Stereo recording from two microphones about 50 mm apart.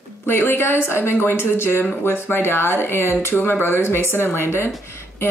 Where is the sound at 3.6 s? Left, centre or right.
Left.